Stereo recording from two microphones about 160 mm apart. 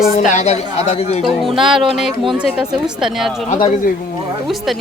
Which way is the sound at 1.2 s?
Centre (ahead or behind).